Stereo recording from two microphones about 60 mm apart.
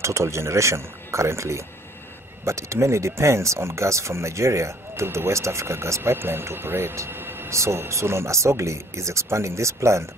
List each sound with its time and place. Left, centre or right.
0.0 s speech: right
7.1 s a sound: right
7.5 s speech: right